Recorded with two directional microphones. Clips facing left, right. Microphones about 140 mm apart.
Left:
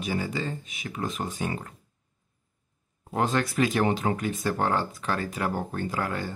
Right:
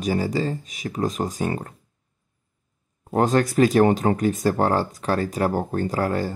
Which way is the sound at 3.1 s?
40° right (ahead or behind).